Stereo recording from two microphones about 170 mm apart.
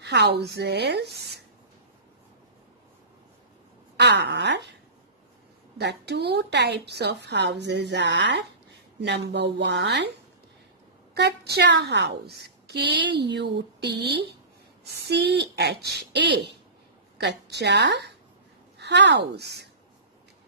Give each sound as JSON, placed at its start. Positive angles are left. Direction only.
{"t": 0.0, "sound": "a woman's voice", "side_deg": -80}
{"t": 3.9, "sound": "speech", "side_deg": -90}
{"t": 5.8, "sound": "a woman's voice", "side_deg": -80}
{"t": 11.1, "sound": "a woman's voice", "side_deg": -75}